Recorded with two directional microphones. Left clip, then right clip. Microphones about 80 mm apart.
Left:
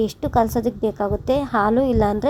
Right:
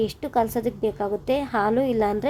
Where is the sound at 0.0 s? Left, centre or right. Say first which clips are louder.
Left 4 dB; left.